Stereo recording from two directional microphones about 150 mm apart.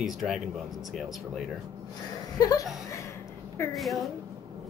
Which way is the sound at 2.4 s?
25° left (ahead or behind).